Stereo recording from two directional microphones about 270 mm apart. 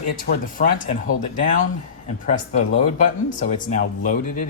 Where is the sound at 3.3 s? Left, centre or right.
Left.